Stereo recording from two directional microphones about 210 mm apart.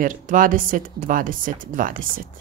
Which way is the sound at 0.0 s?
40° right (ahead or behind).